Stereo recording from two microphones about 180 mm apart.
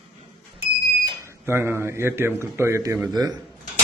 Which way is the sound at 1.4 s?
10° right (ahead or behind).